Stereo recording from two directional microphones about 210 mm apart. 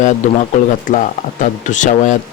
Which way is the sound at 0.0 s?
35° left (ahead or behind).